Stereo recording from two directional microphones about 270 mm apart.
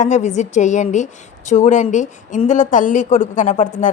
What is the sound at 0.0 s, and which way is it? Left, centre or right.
A woman's voice, left.